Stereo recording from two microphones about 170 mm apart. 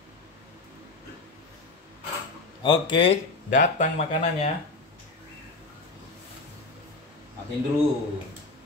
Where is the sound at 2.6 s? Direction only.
25° left (ahead or behind).